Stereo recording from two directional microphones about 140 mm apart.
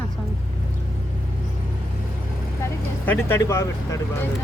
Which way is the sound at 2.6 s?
15° left (ahead or behind).